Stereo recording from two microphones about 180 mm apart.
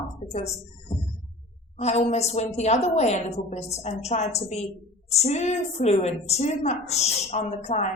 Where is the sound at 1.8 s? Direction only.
40° left (ahead or behind).